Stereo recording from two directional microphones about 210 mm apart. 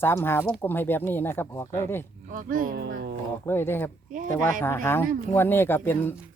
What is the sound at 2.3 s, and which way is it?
Speech, 40° right (ahead or behind).